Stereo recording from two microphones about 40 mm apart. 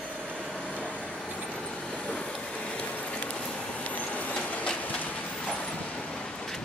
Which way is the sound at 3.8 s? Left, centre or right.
Left.